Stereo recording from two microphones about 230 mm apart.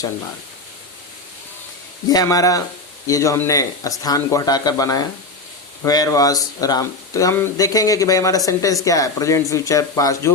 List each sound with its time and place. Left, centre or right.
2.0 s speech: centre